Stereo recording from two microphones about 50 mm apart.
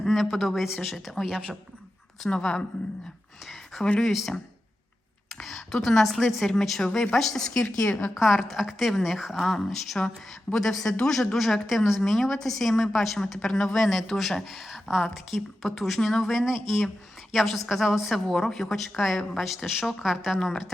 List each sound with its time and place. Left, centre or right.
0.0 s a woman's voice: centre
2.3 s a woman's voice: centre
3.4 s a sound: centre
4.0 s a woman's voice: centre
5.4 s speech: centre
8.1 s a woman's voice: centre